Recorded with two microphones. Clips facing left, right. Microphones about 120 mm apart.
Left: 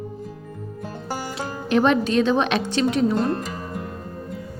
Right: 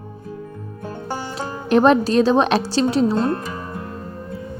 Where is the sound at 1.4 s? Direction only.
40° right (ahead or behind).